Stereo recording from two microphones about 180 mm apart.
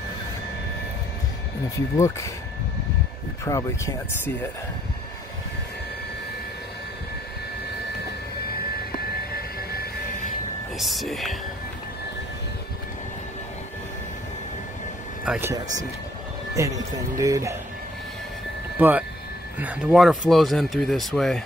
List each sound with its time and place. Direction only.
2.0 s speech: 15° left (ahead or behind)
3.4 s speech: 15° left (ahead or behind)
9.3 s aircraft: 60° left (ahead or behind)
10.8 s speech: centre (ahead or behind)
15.2 s speech: 5° right (ahead or behind)
15.5 s speech: 20° right (ahead or behind)
18.8 s speech: 10° right (ahead or behind)